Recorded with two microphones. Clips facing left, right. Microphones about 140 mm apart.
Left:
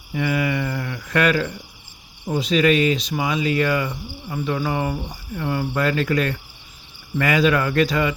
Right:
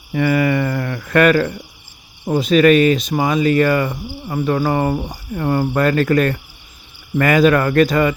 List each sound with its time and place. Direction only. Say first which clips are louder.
0.1 s speech: right 6 dB; 55° right (ahead or behind)